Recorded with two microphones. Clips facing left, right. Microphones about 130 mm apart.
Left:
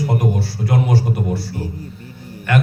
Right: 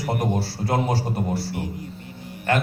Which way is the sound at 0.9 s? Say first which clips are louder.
Left 5 dB; 45° left (ahead or behind).